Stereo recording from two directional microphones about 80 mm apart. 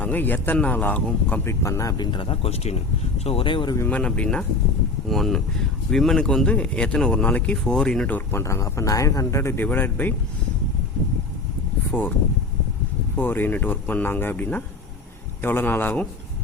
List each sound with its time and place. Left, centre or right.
0.0 s speech: left
1.5 s speech: left
2.0 s speech: left
3.4 s speech: left
3.8 s speech: centre
5.0 s speech: centre
8.3 s speech: left
9.6 s speech: left
11.9 s speech: left
13.1 s speech: left